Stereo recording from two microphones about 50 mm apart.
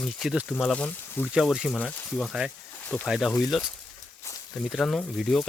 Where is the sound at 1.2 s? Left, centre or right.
Left.